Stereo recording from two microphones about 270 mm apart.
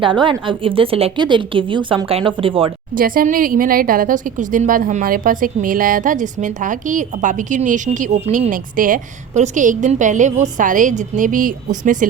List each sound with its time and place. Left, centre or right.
0.0 s a woman's voice: centre
2.9 s a woman's voice: right